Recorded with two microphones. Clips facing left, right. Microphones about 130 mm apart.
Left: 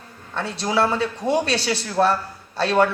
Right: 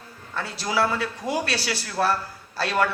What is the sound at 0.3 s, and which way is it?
Speech, 25° left (ahead or behind).